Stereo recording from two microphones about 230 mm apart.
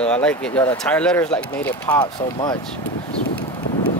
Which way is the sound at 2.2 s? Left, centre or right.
Centre.